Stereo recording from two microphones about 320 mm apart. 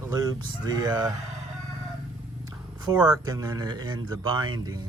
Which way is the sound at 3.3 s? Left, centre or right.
Centre.